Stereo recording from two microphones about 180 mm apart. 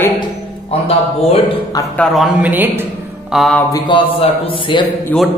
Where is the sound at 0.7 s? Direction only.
35° left (ahead or behind).